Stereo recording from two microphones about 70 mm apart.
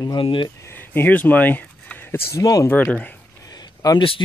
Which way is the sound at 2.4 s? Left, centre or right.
Left.